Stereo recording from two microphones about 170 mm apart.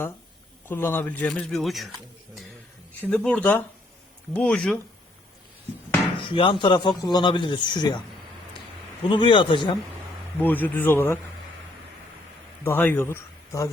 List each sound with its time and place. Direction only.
0.7 s speech: 15° left (ahead or behind)
3.0 s speech: 5° left (ahead or behind)
6.3 s a man's voice: 30° left (ahead or behind)
9.0 s a man's voice: 30° left (ahead or behind)
10.4 s speech: 10° left (ahead or behind)
12.6 s a man's voice: 10° left (ahead or behind)